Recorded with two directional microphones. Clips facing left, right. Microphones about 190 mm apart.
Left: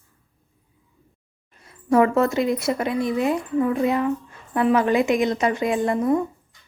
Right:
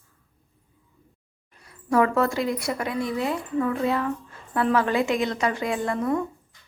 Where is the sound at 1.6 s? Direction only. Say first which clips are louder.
Left 4 dB; 20° left (ahead or behind).